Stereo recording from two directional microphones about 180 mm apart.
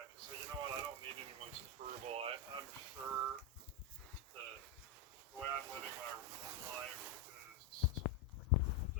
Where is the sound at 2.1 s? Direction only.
35° right (ahead or behind).